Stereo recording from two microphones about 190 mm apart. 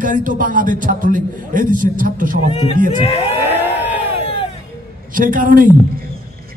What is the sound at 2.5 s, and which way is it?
Speech, 30° left (ahead or behind).